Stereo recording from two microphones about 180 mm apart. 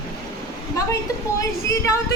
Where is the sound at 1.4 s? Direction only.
15° left (ahead or behind).